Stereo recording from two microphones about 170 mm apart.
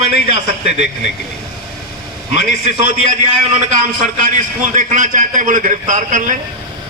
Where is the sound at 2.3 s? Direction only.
45° right (ahead or behind).